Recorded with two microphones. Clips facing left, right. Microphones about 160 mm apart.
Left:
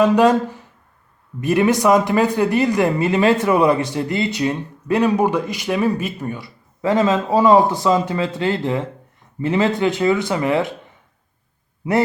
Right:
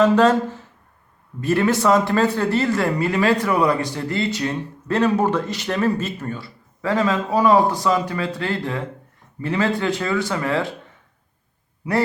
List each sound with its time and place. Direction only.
0.0 s a man's voice: 15° left (ahead or behind)